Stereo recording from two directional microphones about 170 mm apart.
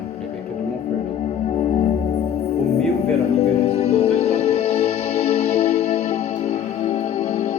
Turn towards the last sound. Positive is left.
turn(degrees=35)  # may be behind; listen again after turning